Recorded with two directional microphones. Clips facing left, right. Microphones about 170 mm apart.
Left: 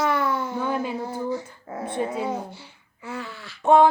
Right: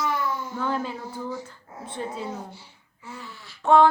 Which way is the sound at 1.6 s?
70° left (ahead or behind).